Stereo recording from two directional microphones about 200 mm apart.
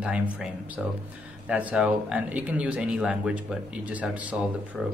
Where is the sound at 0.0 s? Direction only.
5° right (ahead or behind).